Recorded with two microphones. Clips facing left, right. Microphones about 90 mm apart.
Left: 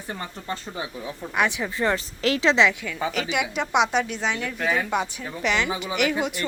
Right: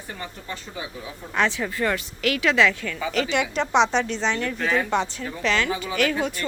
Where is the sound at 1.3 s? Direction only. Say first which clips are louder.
Right 1 dB; 15° left (ahead or behind).